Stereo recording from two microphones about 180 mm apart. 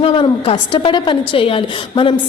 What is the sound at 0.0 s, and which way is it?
A woman's voice, 35° left (ahead or behind).